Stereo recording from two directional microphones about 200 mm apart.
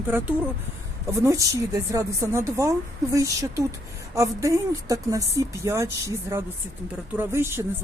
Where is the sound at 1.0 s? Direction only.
15° right (ahead or behind).